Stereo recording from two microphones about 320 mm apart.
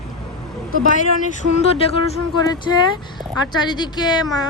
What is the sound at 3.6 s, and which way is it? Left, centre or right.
Speech, centre.